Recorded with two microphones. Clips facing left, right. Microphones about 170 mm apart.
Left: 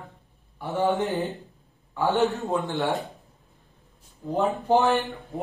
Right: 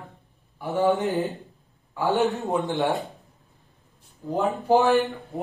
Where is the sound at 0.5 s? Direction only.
15° right (ahead or behind).